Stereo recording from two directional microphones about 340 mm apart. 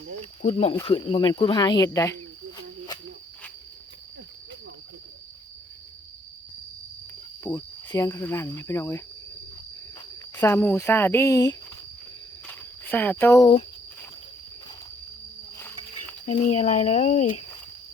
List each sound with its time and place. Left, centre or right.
0.4 s speech: centre
7.4 s speech: centre
10.3 s speech: centre
16.2 s speech: left